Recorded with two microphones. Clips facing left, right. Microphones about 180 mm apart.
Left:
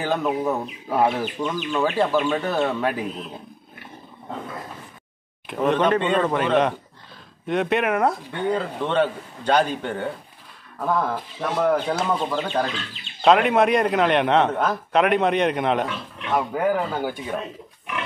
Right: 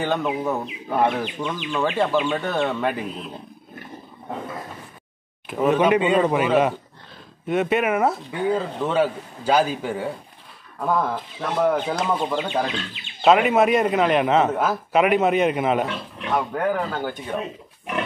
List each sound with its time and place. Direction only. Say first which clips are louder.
0.0 s a man's voice: even; centre (ahead or behind)
5.5 s a man's voice: right 2 dB; 5° right (ahead or behind)